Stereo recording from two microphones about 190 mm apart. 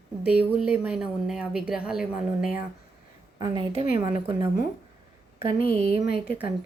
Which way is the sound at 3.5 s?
25° right (ahead or behind).